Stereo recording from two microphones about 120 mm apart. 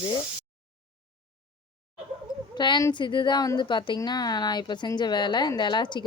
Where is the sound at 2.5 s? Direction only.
40° left (ahead or behind).